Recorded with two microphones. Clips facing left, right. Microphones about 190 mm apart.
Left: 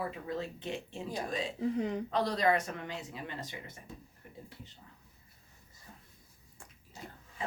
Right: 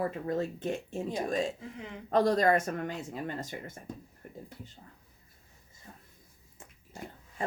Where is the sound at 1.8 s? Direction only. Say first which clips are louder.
Left 10 dB; 40° left (ahead or behind).